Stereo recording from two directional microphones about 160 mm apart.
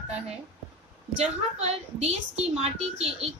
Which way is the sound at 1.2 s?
45° right (ahead or behind).